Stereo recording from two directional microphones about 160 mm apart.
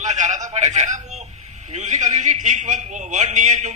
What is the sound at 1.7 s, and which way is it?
A man's voice, 50° right (ahead or behind).